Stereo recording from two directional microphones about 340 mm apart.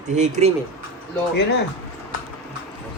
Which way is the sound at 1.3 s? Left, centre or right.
Left.